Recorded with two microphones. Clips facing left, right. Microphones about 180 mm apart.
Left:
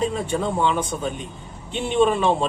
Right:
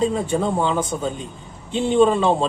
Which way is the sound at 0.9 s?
55° right (ahead or behind).